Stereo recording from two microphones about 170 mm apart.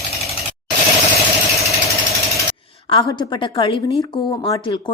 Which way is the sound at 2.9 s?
30° left (ahead or behind).